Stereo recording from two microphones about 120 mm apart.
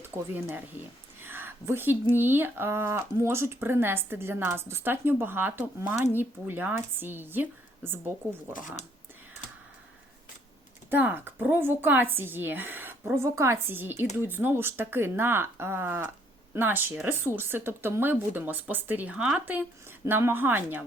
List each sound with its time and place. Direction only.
0.0 s speech: 20° right (ahead or behind)
10.9 s speech: 15° right (ahead or behind)